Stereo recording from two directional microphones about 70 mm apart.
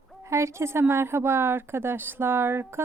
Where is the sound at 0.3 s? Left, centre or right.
Right.